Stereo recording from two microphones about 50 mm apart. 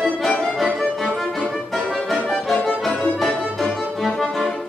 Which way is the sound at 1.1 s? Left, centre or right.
Centre.